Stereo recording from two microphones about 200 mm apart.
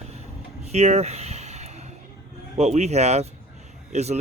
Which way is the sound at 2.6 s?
35° right (ahead or behind).